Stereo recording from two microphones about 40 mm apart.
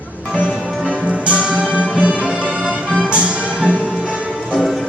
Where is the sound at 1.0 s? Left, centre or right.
Right.